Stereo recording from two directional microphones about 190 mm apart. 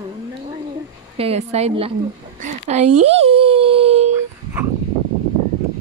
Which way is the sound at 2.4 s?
35° right (ahead or behind).